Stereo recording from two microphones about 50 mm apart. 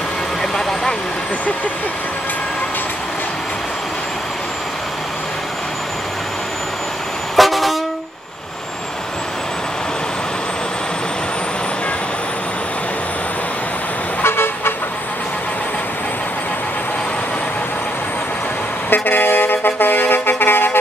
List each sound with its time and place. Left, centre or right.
0.4 s vehicle: centre
7.3 s vehicle: centre
14.2 s toot: left
18.9 s music: left